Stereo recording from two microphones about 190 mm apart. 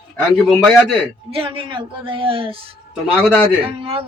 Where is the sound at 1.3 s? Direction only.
30° right (ahead or behind).